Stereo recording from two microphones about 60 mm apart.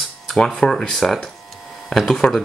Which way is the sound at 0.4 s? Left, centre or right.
Centre.